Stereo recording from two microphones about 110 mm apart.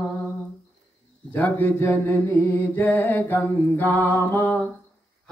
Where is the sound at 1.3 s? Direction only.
15° left (ahead or behind).